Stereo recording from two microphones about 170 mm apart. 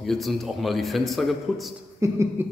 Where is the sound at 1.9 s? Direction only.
15° right (ahead or behind).